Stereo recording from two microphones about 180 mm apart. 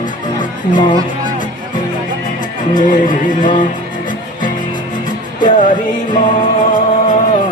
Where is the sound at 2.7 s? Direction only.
50° left (ahead or behind).